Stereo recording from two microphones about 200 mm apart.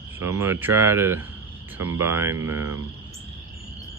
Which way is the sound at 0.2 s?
10° right (ahead or behind).